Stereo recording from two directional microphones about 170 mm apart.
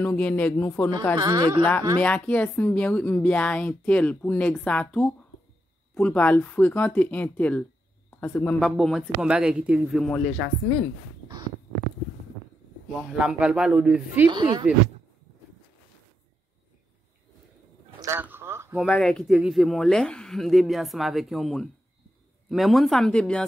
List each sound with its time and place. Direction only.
0.0 s speech: 10° left (ahead or behind)
1.1 s speech: 25° right (ahead or behind)
1.6 s speech: 10° left (ahead or behind)
13.2 s a man's voice: 5° right (ahead or behind)
14.3 s speech: 25° right (ahead or behind)
18.0 s a sound: 15° right (ahead or behind)
18.8 s speech: centre (ahead or behind)